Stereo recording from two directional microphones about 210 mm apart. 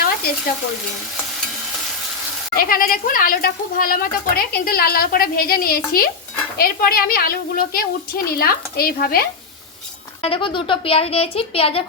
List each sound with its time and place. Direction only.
2.6 s speech: 45° left (ahead or behind)
10.2 s speech: 25° left (ahead or behind)